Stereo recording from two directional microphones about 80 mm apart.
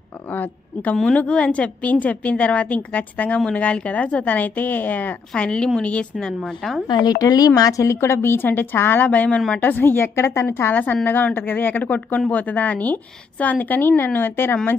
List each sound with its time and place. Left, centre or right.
0.3 s a woman's voice: left; by 6.8 s centre
6.9 s a woman's voice: left
10.7 s a woman's voice: centre